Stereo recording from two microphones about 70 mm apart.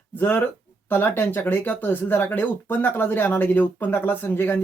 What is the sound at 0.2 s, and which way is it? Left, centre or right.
Speech, left.